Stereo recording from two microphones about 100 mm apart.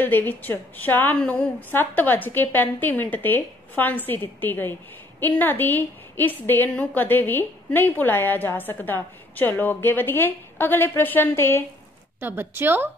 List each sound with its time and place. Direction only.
0.0 s a woman's voice: 20° left (ahead or behind)
12.2 s a woman's voice: 20° right (ahead or behind)